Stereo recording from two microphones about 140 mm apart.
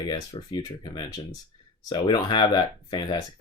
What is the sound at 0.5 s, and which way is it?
Speech, 30° left (ahead or behind).